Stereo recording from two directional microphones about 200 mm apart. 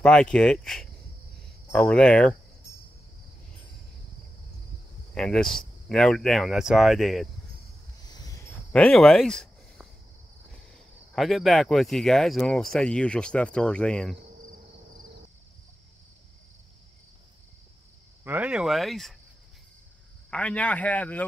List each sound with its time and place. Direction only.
0.0 s speech: 5° left (ahead or behind)
5.1 s speech: 5° left (ahead or behind)
8.0 s train: 20° left (ahead or behind)
8.7 s speech: 5° left (ahead or behind)
18.2 s speech: 10° right (ahead or behind)
20.2 s speech: 5° left (ahead or behind)